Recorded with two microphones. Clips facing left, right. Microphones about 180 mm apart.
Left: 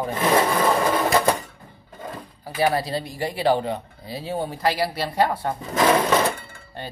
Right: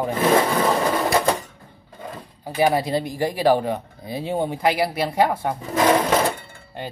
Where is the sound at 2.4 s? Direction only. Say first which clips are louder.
Right 3 dB; 15° right (ahead or behind).